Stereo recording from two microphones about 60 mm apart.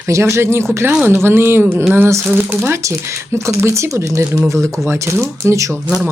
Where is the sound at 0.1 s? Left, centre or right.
Right.